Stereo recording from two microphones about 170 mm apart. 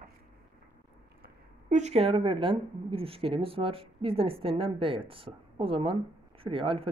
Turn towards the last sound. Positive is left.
turn(degrees=-30)  # may be behind; listen again after turning